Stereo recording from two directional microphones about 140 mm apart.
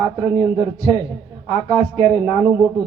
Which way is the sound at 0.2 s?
35° right (ahead or behind).